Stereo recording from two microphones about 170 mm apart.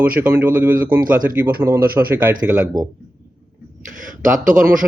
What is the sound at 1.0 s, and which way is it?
Speech, 55° right (ahead or behind).